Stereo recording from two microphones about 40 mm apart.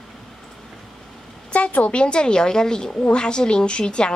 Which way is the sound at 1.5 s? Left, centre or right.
Left.